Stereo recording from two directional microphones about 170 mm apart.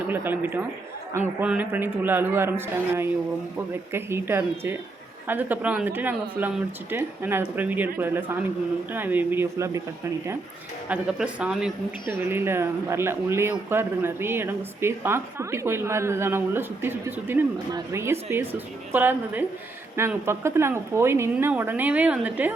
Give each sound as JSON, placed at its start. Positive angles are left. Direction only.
{"t": 0.1, "sound": "a man's voice", "side_deg": -10}
{"t": 10.8, "sound": "a man's voice", "side_deg": -5}